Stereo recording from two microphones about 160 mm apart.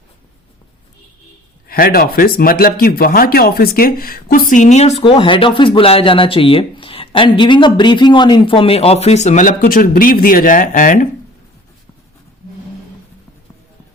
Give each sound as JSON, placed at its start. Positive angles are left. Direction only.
{"t": 1.6, "sound": "speech", "side_deg": 65}
{"t": 5.0, "sound": "speech", "side_deg": 30}